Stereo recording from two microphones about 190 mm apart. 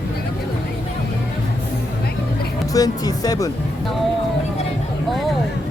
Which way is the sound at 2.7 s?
20° left (ahead or behind).